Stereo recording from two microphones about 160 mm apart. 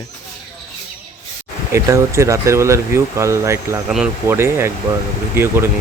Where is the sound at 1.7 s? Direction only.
20° right (ahead or behind).